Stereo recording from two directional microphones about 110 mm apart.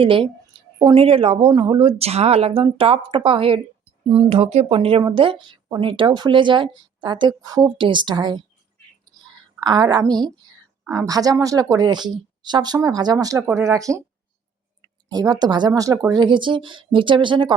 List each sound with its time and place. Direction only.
0.0 s speech: 55° right (ahead or behind); by 7.7 s 35° right (ahead or behind)
7.8 s speech: 45° right (ahead or behind)
9.6 s speech: 40° right (ahead or behind)
15.1 s speech: 40° right (ahead or behind)
16.1 s speech: 45° right (ahead or behind)